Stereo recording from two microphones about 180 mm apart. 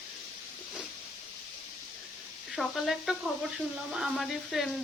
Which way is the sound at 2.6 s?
Centre (ahead or behind).